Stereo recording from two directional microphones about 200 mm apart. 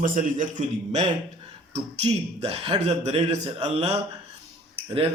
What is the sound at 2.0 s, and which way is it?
A man's voice, 30° right (ahead or behind).